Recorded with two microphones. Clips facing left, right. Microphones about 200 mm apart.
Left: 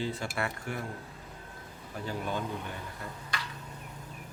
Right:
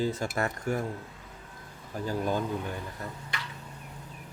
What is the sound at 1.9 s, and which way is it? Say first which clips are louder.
Speech: right 5 dB; 40° right (ahead or behind).